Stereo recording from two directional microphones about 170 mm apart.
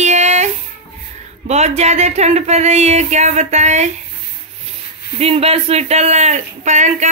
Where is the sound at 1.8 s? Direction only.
40° right (ahead or behind).